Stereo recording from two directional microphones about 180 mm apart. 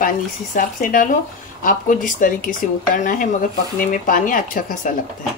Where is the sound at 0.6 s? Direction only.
50° left (ahead or behind).